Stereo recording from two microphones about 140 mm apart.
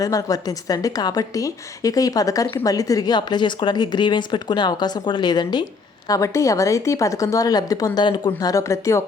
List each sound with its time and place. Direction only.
0.0 s a woman's voice: 25° left (ahead or behind)